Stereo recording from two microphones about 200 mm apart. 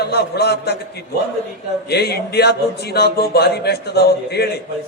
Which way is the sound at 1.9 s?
55° left (ahead or behind).